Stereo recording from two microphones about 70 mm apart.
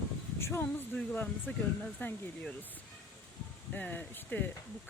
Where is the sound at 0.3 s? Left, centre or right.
Left.